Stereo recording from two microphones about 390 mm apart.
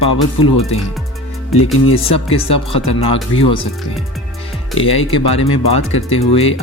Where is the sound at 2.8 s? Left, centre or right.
Left.